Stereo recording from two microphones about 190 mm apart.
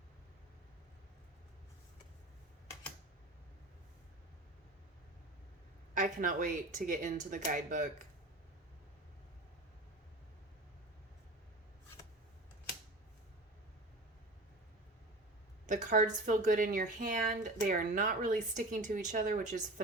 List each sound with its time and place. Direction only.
5.9 s speech: 45° right (ahead or behind)
15.6 s a sound: 40° right (ahead or behind)
16.2 s speech: 45° right (ahead or behind)